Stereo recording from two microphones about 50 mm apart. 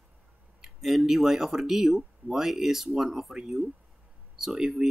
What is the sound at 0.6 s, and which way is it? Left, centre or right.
Speech, centre.